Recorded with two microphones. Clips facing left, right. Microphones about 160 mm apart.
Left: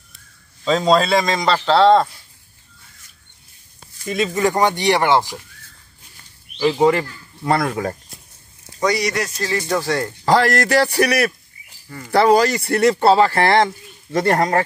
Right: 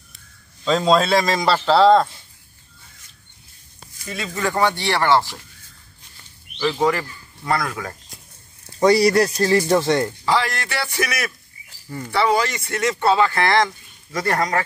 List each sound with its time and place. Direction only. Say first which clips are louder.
0.7 s a man's voice: left 1 dB; centre (ahead or behind)
4.0 s speech: left 7 dB; 20° left (ahead or behind)
6.8 s speech: left 5 dB; 25° left (ahead or behind)
8.7 s speech: right 5 dB; 30° right (ahead or behind)
10.2 s speech: left 6 dB; 45° left (ahead or behind)